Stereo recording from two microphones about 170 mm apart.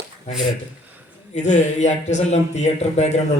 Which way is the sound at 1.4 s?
45° left (ahead or behind).